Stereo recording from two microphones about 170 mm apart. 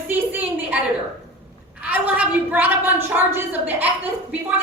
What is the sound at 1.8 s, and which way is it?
A woman's voice, 10° right (ahead or behind).